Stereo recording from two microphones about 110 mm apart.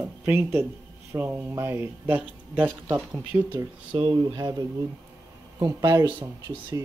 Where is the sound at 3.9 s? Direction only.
55° right (ahead or behind).